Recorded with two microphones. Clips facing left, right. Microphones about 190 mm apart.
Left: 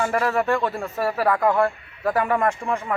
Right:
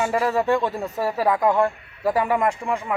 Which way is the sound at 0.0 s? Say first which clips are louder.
Right 1 dB; 15° right (ahead or behind).